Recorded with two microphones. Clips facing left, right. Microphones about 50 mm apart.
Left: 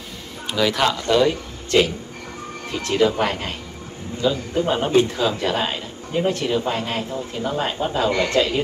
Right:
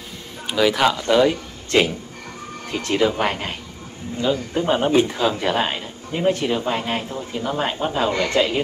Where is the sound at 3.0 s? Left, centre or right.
Centre.